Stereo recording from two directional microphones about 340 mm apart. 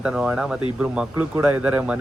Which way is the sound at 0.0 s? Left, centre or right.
Centre.